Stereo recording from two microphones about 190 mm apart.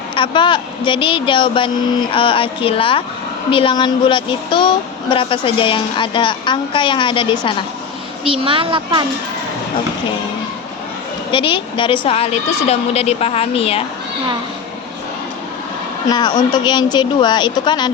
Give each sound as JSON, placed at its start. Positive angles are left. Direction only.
{"t": 0.2, "sound": "speech", "side_deg": 25}
{"t": 8.2, "sound": "a woman's voice", "side_deg": -30}
{"t": 11.3, "sound": "a woman's voice", "side_deg": 25}
{"t": 16.0, "sound": "speech", "side_deg": 20}